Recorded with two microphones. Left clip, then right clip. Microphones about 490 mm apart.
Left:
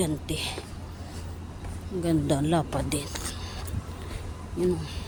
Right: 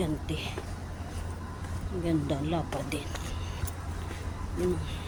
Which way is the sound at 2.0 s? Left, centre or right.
Right.